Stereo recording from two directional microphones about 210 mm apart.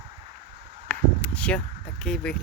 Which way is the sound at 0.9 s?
5° left (ahead or behind).